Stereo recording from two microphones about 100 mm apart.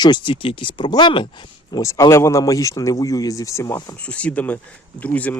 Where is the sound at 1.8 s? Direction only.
30° left (ahead or behind).